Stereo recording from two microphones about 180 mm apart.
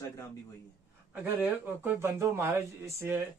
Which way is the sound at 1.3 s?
10° right (ahead or behind).